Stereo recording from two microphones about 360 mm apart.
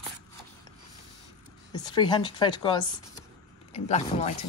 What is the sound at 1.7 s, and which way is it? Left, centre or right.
Speech, centre.